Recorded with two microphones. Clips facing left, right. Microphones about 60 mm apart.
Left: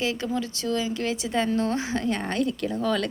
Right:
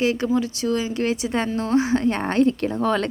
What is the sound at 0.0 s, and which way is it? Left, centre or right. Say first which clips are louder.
A woman's voice: right 6 dB; right.